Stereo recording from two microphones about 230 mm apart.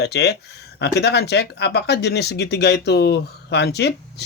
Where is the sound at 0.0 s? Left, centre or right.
Left.